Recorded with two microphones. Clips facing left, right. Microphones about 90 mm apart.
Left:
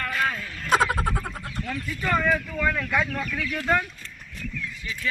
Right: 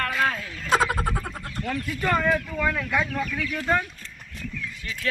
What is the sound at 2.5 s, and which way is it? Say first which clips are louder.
Speech: even; 10° right (ahead or behind).